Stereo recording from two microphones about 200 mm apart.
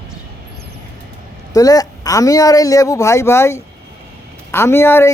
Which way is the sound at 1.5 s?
15° left (ahead or behind).